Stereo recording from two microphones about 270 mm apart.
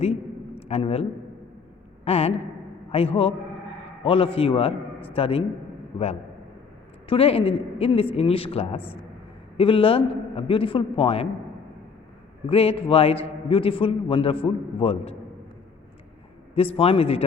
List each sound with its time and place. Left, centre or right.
0.7 s a man's voice: left
2.0 s a man's voice: left
7.1 s a man's voice: left
12.5 s a man's voice: left
16.6 s a man's voice: left